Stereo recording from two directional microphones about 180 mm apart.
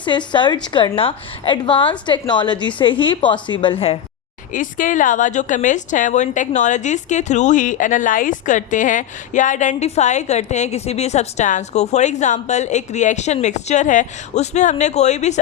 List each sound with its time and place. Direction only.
0.0 s a woman's voice: 25° left (ahead or behind)
4.5 s a woman's voice: 45° left (ahead or behind)